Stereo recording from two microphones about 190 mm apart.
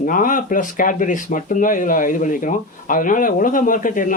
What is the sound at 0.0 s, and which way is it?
Speech, 45° left (ahead or behind).